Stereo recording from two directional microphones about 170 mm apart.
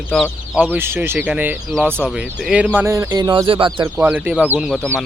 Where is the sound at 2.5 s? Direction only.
10° right (ahead or behind); by 3.8 s 30° right (ahead or behind).